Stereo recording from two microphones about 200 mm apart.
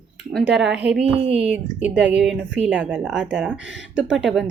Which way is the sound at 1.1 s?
30° right (ahead or behind).